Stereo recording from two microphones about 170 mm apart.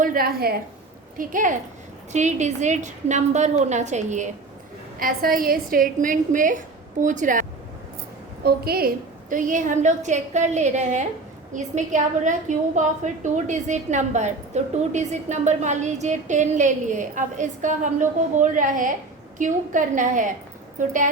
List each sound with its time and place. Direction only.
0.0 s a woman's voice: 55° right (ahead or behind)
1.2 s a woman's voice: 50° right (ahead or behind)
4.9 s a woman's voice: 55° right (ahead or behind)
8.4 s a woman's voice: 65° right (ahead or behind)
9.3 s a woman's voice: 50° right (ahead or behind)